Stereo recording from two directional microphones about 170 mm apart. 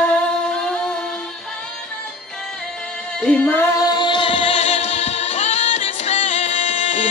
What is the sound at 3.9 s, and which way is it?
Music, 30° left (ahead or behind).